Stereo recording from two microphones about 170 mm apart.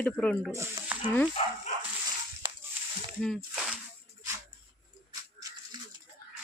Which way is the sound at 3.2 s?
Centre (ahead or behind).